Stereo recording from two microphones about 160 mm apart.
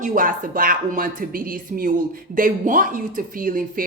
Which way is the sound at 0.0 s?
60° right (ahead or behind).